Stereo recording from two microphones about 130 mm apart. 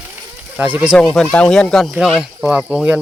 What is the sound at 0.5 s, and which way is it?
Speech, 10° right (ahead or behind).